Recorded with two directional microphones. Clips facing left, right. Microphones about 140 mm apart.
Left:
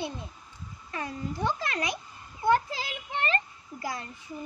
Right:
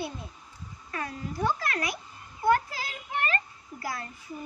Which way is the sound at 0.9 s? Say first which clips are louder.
Left 1 dB; 20° left (ahead or behind).